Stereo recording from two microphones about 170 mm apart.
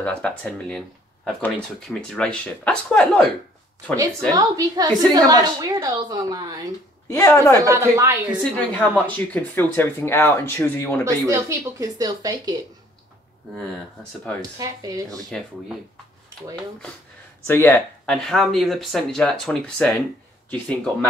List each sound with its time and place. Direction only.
0.0 s speech: 5° left (ahead or behind)
4.3 s a woman's voice: 20° right (ahead or behind)
7.1 s speech: 15° left (ahead or behind)
7.6 s speech: 15° right (ahead or behind)
8.7 s speech: 10° left (ahead or behind)
11.1 s a woman's voice: 15° right (ahead or behind)
14.6 s a woman's voice: 20° right (ahead or behind)
17.5 s speech: 15° left (ahead or behind)